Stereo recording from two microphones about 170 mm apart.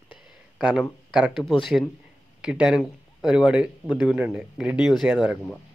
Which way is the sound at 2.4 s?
5° right (ahead or behind).